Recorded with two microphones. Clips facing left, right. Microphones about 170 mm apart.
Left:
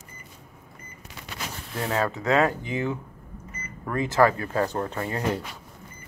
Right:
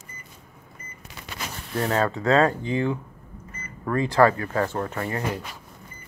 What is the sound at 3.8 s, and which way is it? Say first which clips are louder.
Speech: right 2 dB; 20° left (ahead or behind).